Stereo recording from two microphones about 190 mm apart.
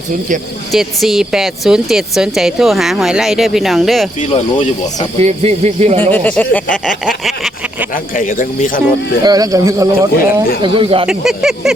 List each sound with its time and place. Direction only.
0.7 s speech: centre (ahead or behind)
4.3 s speech: 35° left (ahead or behind)
5.2 s speech: 35° right (ahead or behind)
6.0 s speech: 10° left (ahead or behind)
8.1 s a man's voice: 45° left (ahead or behind)
9.2 s a man's voice: 20° right (ahead or behind)
11.0 s speech: centre (ahead or behind)